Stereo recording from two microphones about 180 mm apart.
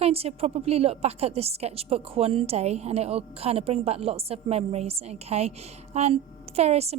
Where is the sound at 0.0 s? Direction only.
35° right (ahead or behind).